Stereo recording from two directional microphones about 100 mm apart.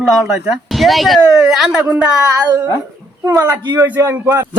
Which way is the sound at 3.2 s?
40° right (ahead or behind).